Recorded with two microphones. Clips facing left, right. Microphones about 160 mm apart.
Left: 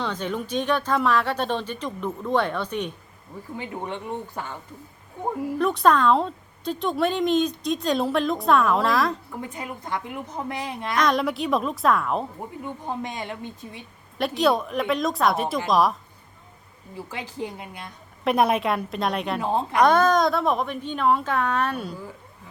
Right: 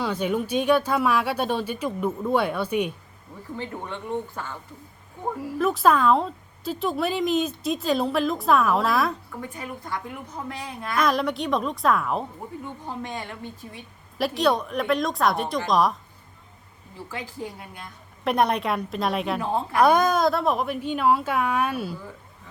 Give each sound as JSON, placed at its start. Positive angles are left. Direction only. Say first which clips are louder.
{"t": 0.0, "sound": "speech", "louder": "right 3 dB", "side_deg": -10}
{"t": 3.6, "sound": "speech", "louder": "left 2 dB", "side_deg": 15}
{"t": 5.5, "sound": "a woman's voice", "louder": "even", "side_deg": 0}
{"t": 9.5, "sound": "a woman's voice", "louder": "left 2 dB", "side_deg": 20}
{"t": 10.9, "sound": "a woman's voice", "louder": "even", "side_deg": -5}
{"t": 13.0, "sound": "speech", "louder": "left 2 dB", "side_deg": 15}
{"t": 14.2, "sound": "a woman's voice", "louder": "left 1 dB", "side_deg": 0}
{"t": 17.1, "sound": "a woman's voice", "louder": "left 1 dB", "side_deg": 20}
{"t": 18.3, "sound": "a woman's voice", "louder": "left 2 dB", "side_deg": 0}